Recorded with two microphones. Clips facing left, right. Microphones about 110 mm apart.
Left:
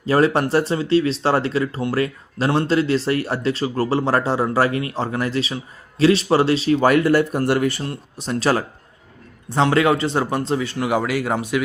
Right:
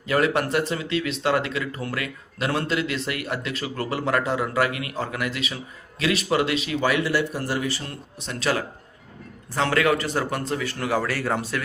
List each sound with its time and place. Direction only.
0.0 s speech: 30° left (ahead or behind); by 7.4 s 50° left (ahead or behind)
7.4 s speech: 60° left (ahead or behind)
8.2 s speech: 40° left (ahead or behind)
9.6 s a man's voice: 25° left (ahead or behind)